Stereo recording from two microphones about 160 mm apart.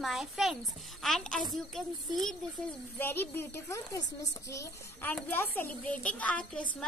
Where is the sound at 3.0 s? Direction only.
15° left (ahead or behind).